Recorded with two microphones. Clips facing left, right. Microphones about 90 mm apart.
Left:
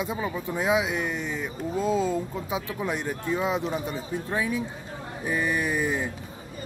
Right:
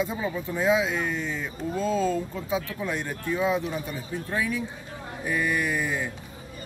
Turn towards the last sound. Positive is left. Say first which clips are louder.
# left 1 dB
turn(degrees=20)  # may be behind; listen again after turning